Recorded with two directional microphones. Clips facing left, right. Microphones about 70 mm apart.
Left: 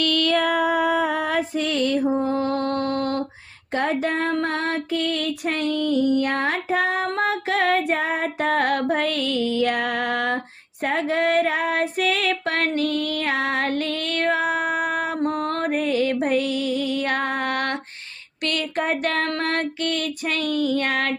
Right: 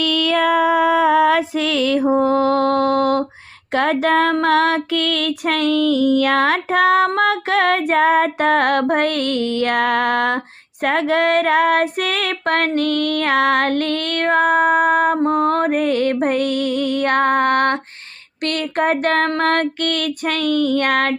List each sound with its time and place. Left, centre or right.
1.4 s mantra: right
3.7 s female singing: right
7.2 s child singing: right
15.2 s music: right
19.4 s child singing: right